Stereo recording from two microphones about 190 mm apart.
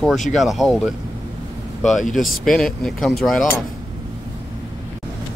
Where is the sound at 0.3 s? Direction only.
Centre (ahead or behind).